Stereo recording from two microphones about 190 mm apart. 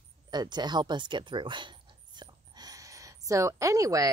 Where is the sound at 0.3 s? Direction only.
20° right (ahead or behind).